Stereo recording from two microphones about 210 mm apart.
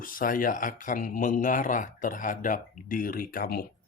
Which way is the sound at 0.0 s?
40° left (ahead or behind).